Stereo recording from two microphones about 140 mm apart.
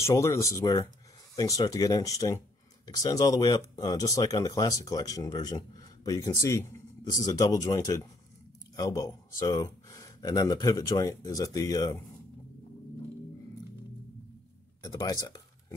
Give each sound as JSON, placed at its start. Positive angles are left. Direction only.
{"t": 0.0, "sound": "speech", "side_deg": 20}
{"t": 14.8, "sound": "speech", "side_deg": 25}